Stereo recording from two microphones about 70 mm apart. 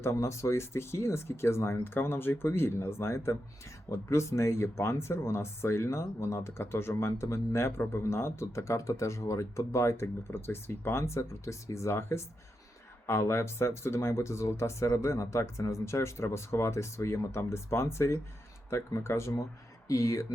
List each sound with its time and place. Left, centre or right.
0.0 s speech: left
19.9 s speech: left